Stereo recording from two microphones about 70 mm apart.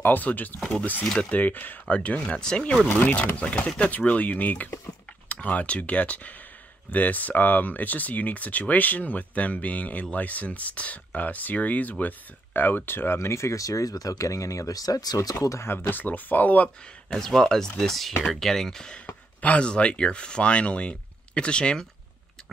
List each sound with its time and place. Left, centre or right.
0.0 s speech: left
15.6 s speech: left
17.1 s speech: centre
19.0 s speech: centre